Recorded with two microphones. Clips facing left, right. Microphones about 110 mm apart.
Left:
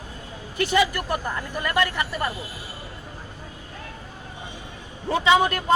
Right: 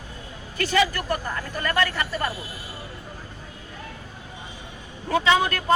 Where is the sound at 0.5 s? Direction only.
20° left (ahead or behind).